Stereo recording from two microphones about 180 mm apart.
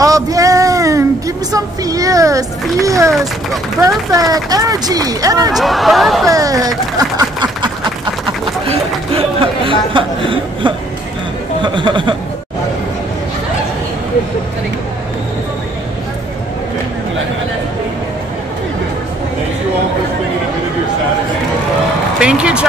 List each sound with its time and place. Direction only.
0.0 s a sound: 20° right (ahead or behind)
3.8 s speech: 20° right (ahead or behind)
5.6 s speech: centre (ahead or behind)
6.2 s a sound: 20° right (ahead or behind)
8.6 s speech: 30° right (ahead or behind)
22.2 s speech: 5° right (ahead or behind)